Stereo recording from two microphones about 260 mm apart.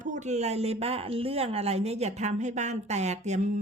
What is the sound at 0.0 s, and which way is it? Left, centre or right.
Speech, right.